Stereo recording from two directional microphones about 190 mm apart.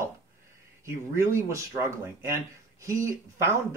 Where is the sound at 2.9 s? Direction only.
15° right (ahead or behind).